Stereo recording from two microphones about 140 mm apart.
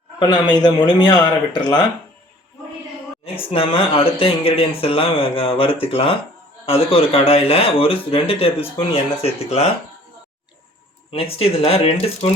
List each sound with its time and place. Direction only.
0.2 s speech: 30° left (ahead or behind)
3.3 s speech: 40° left (ahead or behind)
11.1 s speech: 45° left (ahead or behind)